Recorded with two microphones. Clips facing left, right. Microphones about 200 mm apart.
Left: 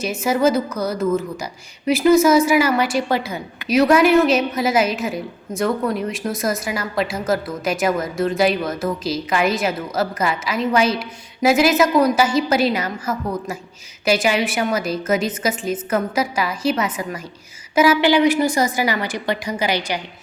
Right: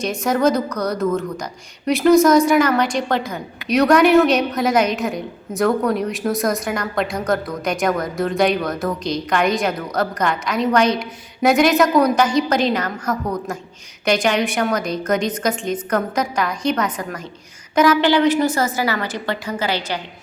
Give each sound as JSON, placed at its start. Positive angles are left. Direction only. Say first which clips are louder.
{"t": 0.0, "sound": "a woman's voice", "louder": "even", "side_deg": 5}